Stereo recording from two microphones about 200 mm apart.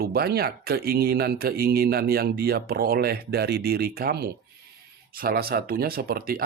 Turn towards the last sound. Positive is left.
turn(degrees=-50)  # may be behind; listen again after turning